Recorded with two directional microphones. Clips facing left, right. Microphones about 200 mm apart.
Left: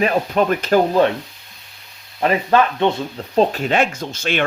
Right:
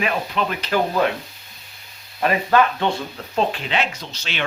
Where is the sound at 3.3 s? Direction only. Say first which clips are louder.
Left 6 dB; 45° left (ahead or behind).